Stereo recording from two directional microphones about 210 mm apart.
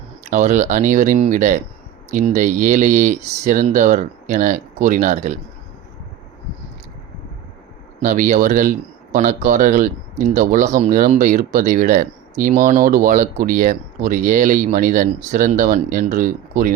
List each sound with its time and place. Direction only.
0.3 s speech: 35° right (ahead or behind)
8.0 s speech: 40° right (ahead or behind)